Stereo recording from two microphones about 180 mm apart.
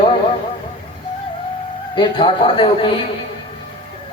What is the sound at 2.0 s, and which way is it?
Speech, 25° left (ahead or behind).